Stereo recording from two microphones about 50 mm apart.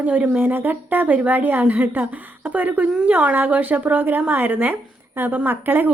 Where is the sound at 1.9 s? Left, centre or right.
Right.